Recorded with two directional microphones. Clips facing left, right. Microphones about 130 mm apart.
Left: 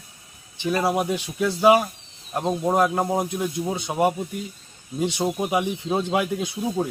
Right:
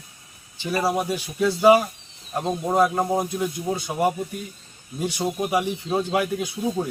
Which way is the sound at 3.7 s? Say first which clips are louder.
Left 2 dB; 20° left (ahead or behind).